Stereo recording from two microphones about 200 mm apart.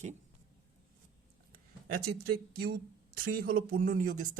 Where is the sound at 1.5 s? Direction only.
50° right (ahead or behind).